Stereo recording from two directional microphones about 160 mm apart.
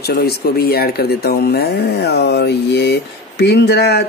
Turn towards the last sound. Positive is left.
turn(degrees=90)